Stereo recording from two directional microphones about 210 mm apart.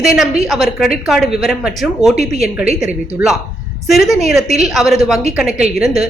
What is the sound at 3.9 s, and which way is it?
A woman's voice, centre (ahead or behind).